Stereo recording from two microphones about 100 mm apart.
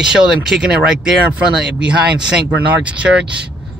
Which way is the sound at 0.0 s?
5° right (ahead or behind).